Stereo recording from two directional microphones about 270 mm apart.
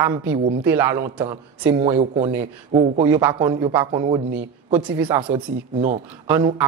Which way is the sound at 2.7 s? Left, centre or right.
Centre.